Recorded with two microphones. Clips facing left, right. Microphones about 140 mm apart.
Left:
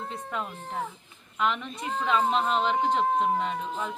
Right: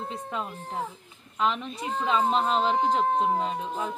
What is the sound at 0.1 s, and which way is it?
Speech, 30° right (ahead or behind).